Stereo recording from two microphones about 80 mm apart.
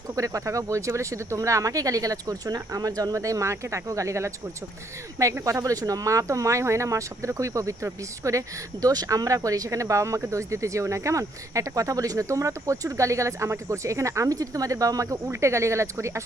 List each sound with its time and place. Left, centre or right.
0.2 s speech: right